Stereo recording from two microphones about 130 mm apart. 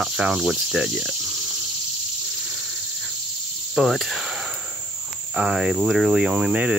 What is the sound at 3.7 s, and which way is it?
Cricket, centre (ahead or behind).